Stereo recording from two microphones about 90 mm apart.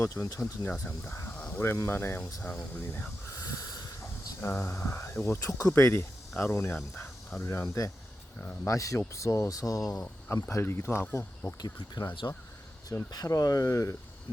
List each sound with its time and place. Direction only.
0.0 s speech: 35° left (ahead or behind)
0.6 s speech: 20° left (ahead or behind)
1.4 s speech: 20° left (ahead or behind)
3.3 s a sound: 40° left (ahead or behind)
4.4 s speech: 30° left (ahead or behind)
10.0 s speech: 20° left (ahead or behind)
12.2 s speech: 35° left (ahead or behind)